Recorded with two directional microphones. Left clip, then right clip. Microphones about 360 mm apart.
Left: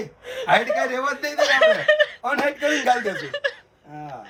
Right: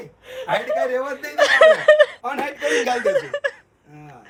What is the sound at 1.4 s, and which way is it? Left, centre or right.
Speech, centre.